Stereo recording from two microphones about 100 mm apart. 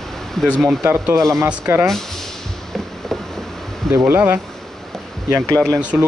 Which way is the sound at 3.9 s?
25° right (ahead or behind).